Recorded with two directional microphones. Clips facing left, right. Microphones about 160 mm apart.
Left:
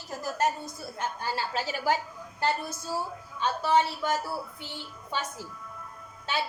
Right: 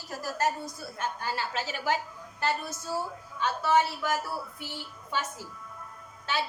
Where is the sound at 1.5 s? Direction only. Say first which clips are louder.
Left 3 dB; 35° left (ahead or behind).